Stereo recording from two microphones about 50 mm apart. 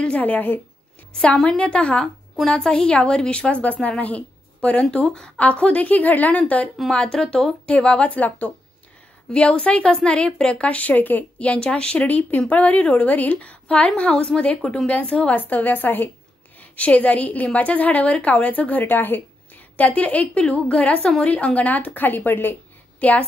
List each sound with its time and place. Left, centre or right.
0.2 s a woman's voice: left
1.2 s a woman's voice: centre
5.4 s a woman's voice: left
6.9 s speech: centre
7.6 s a woman's voice: left
12.0 s a woman's voice: left; by 14.5 s centre
14.9 s a woman's voice: left
16.5 s a woman's voice: left
22.9 s a woman's voice: left